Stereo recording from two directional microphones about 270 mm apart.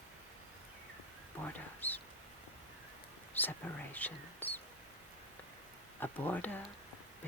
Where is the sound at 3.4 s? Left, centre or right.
Centre.